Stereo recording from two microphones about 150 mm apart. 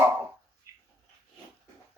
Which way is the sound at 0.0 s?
20° right (ahead or behind).